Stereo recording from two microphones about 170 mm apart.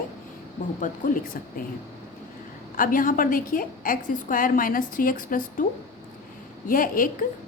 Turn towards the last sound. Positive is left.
turn(degrees=55)  # may be behind; listen again after turning